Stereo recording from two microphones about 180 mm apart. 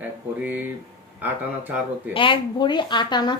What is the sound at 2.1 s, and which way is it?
Speech, 25° left (ahead or behind).